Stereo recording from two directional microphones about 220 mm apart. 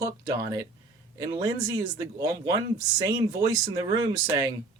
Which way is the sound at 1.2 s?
15° right (ahead or behind).